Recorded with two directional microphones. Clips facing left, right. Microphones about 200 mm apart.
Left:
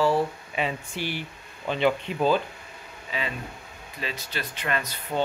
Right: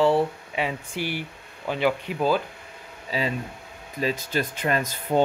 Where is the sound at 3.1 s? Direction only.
35° right (ahead or behind).